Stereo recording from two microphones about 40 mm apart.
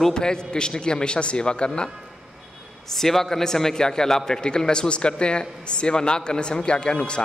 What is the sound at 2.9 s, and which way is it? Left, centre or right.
A man's voice, centre.